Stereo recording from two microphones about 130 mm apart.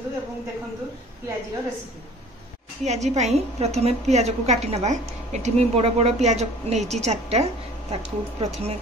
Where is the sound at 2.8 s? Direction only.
60° right (ahead or behind).